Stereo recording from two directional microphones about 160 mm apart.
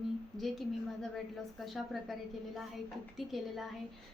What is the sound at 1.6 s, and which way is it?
A woman's voice, centre (ahead or behind).